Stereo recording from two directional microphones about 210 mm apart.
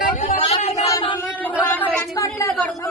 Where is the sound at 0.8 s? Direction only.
15° left (ahead or behind).